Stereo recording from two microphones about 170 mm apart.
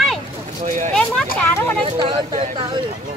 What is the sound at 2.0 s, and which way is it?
Speech, 30° right (ahead or behind).